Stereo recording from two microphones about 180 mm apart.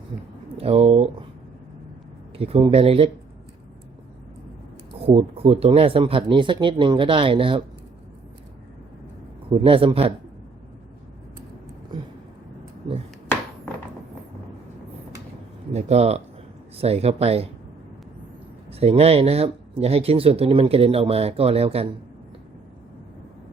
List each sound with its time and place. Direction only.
0.5 s speech: 35° right (ahead or behind)
2.4 s speech: 35° right (ahead or behind)
4.9 s speech: 35° right (ahead or behind)
9.5 s speech: 30° right (ahead or behind)
11.9 s speech: 25° right (ahead or behind)
15.7 s speech: 35° right (ahead or behind)
18.7 s speech: 35° right (ahead or behind)